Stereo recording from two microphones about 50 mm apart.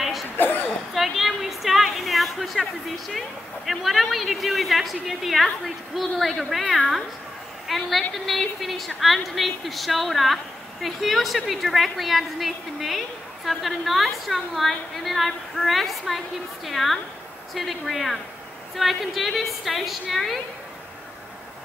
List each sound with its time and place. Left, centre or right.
0.4 s cough: left
0.9 s a sound: centre
3.8 s a woman's voice: centre
7.6 s a woman's voice: centre